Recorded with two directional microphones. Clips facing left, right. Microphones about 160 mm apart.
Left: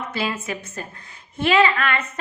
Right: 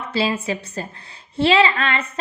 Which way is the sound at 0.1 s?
30° right (ahead or behind).